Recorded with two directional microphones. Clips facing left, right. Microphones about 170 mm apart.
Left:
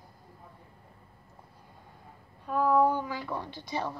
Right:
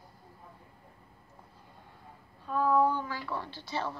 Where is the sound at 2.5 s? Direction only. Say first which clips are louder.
Left 2 dB; 10° left (ahead or behind).